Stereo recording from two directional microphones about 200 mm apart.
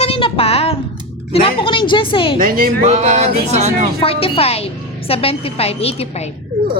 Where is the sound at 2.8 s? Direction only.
35° right (ahead or behind).